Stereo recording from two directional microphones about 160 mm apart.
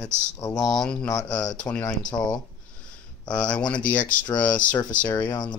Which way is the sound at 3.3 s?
5° left (ahead or behind).